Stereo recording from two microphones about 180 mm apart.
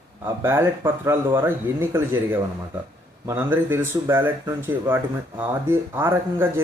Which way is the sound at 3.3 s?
10° right (ahead or behind).